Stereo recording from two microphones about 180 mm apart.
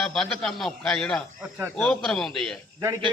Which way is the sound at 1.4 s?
10° right (ahead or behind).